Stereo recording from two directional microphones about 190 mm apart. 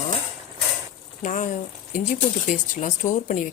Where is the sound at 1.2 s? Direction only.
45° left (ahead or behind).